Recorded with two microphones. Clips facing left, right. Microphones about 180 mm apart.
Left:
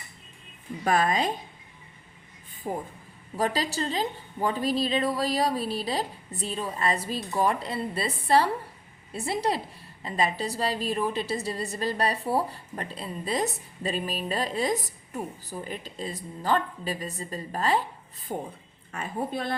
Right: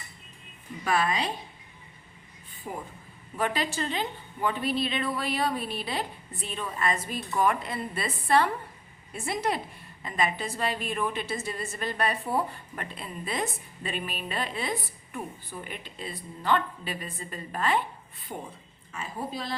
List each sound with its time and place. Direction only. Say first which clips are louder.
0.9 s a woman's voice: left 3 dB; 45° left (ahead or behind)
2.6 s a woman's voice: left 5 dB; 30° left (ahead or behind)
18.9 s a woman's voice: left 4 dB; 55° left (ahead or behind)